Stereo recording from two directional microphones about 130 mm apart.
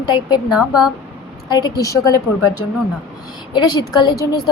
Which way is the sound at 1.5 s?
30° left (ahead or behind).